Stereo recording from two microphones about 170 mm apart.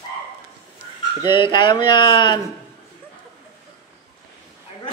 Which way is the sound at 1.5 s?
25° left (ahead or behind).